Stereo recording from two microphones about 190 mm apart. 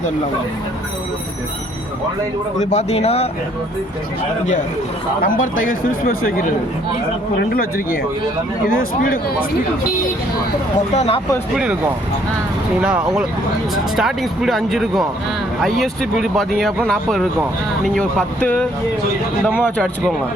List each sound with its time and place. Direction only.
2.6 s speech: 35° left (ahead or behind)
5.2 s speech: 45° left (ahead or behind)
7.5 s speech: 50° left (ahead or behind)
10.9 s speech: 35° left (ahead or behind)
11.5 s speech: 5° right (ahead or behind)
12.8 s speech: 5° right (ahead or behind)